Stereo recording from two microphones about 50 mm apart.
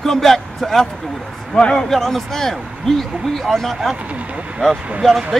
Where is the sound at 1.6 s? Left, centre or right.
Centre.